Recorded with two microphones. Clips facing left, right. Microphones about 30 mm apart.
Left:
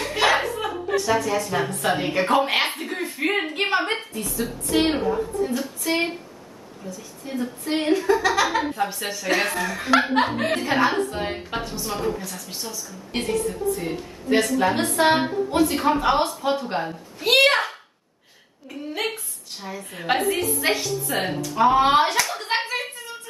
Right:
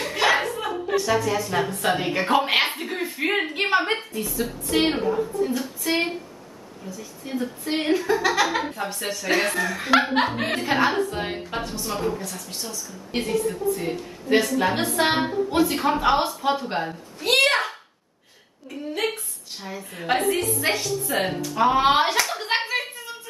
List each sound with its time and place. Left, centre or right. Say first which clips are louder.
0.0 s speech: left 1 dB; centre
6.8 s a woman's voice: left 2 dB; right
7.2 s speech: left 1 dB; centre
7.9 s speech: left 2 dB; centre
22.7 s a sound: right 1 dB; centre